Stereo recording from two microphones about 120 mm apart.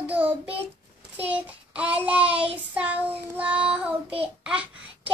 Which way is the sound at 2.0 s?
10° right (ahead or behind).